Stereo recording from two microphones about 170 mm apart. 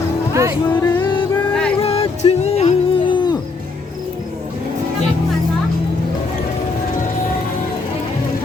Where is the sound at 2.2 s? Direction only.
30° left (ahead or behind).